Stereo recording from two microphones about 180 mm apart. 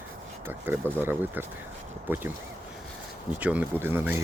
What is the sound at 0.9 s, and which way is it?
Speech, 10° right (ahead or behind).